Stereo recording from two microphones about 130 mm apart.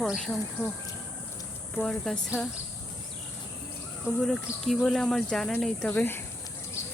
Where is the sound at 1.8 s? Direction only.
5° left (ahead or behind).